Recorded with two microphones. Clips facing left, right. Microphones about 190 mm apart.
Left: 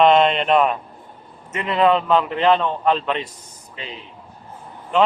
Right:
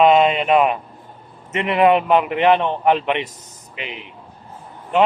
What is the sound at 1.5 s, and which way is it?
A man's voice, 20° right (ahead or behind).